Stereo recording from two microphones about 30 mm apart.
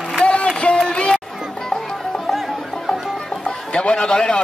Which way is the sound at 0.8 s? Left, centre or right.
Left.